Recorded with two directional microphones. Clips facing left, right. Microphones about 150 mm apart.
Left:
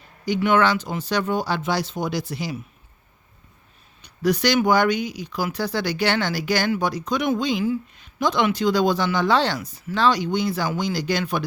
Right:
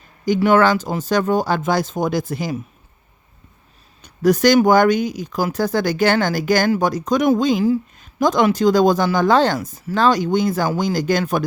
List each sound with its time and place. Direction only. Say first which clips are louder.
0.3 s speech: right 5 dB; 40° right (ahead or behind)
4.0 s speech: right 6 dB; 45° right (ahead or behind)